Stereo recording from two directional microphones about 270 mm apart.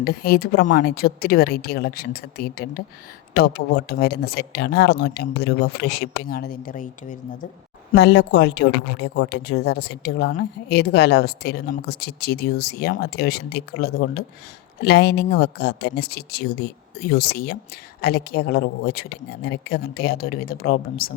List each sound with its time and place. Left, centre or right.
0.0 s speech: left